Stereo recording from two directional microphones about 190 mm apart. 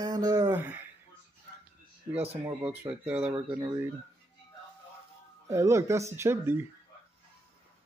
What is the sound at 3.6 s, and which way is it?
Speech, 20° right (ahead or behind).